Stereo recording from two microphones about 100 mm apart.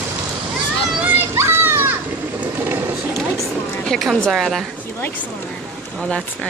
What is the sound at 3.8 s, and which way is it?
Speech, centre (ahead or behind).